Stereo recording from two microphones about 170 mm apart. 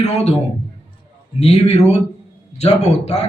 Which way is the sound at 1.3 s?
40° left (ahead or behind).